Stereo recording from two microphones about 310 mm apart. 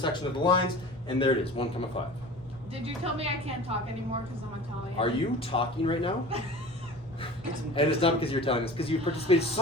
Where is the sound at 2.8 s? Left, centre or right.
Centre.